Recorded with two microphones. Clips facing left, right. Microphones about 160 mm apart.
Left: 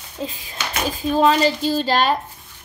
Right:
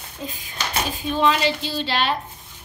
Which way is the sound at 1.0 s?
40° left (ahead or behind).